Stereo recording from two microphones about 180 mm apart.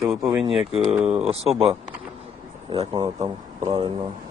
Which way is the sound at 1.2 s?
35° right (ahead or behind).